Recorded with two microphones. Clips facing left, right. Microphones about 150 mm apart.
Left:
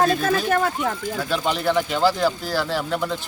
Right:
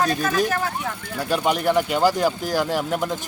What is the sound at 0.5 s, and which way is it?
Speech, 55° left (ahead or behind).